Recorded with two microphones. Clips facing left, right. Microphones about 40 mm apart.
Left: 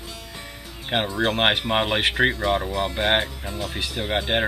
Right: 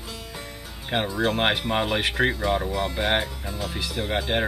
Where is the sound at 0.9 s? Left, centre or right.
Centre.